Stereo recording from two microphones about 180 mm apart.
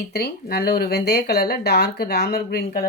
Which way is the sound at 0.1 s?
60° left (ahead or behind).